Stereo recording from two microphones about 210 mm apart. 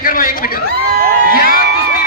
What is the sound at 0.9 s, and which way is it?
Crowd, 45° right (ahead or behind).